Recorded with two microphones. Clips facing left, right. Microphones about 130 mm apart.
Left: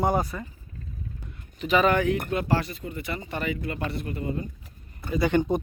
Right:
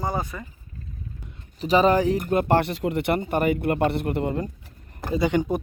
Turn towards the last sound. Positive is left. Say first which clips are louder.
# right 1 dB
turn(degrees=-15)  # may be behind; listen again after turning